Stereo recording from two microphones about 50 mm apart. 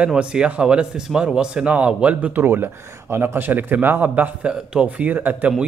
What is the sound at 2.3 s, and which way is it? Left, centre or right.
Speech, right.